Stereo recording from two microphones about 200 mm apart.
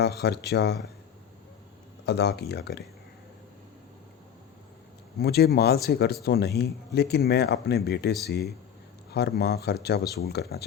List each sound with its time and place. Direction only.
0.0 s speech: 55° left (ahead or behind)
2.0 s speech: 55° left (ahead or behind)
5.2 s speech: 55° left (ahead or behind)